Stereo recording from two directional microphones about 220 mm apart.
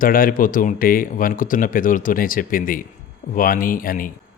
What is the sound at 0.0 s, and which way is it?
Speech, 40° left (ahead or behind).